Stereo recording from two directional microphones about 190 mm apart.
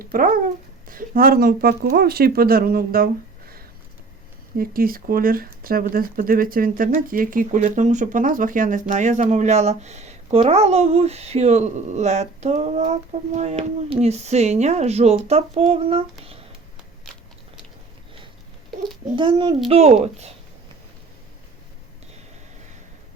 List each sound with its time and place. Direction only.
0.0 s speech: 50° right (ahead or behind)
4.5 s speech: 50° right (ahead or behind); by 16.0 s 30° right (ahead or behind)
19.1 s speech: 25° right (ahead or behind)